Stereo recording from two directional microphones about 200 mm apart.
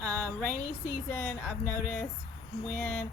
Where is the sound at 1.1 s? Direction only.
10° left (ahead or behind).